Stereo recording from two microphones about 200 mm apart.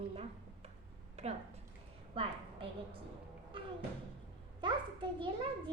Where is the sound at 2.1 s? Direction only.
30° right (ahead or behind).